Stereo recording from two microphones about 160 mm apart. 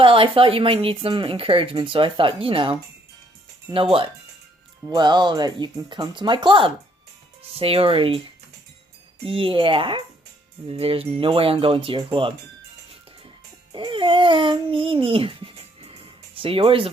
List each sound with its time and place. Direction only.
0.0 s speech: 35° right (ahead or behind)
13.7 s speech: 30° right (ahead or behind)